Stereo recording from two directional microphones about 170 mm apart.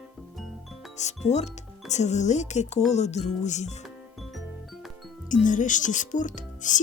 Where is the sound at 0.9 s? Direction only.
40° left (ahead or behind).